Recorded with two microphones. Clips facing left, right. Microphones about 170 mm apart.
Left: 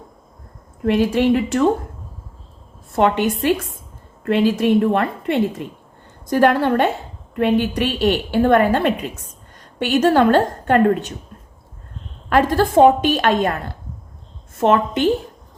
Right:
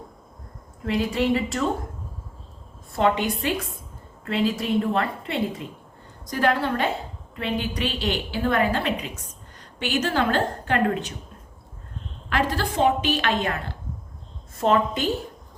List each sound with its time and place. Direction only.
0.9 s speech: 65° left (ahead or behind)
3.0 s a woman's voice: 55° left (ahead or behind)
12.3 s a woman's voice: 50° left (ahead or behind)
14.6 s speech: 70° left (ahead or behind)